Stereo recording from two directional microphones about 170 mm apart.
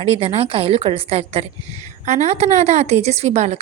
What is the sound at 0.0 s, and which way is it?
A woman's voice, 35° right (ahead or behind).